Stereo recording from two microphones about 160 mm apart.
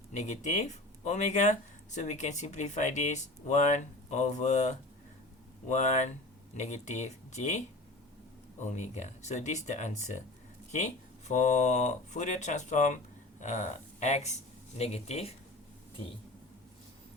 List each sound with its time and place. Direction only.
0.1 s speech: 50° left (ahead or behind)
8.6 s speech: 45° left (ahead or behind)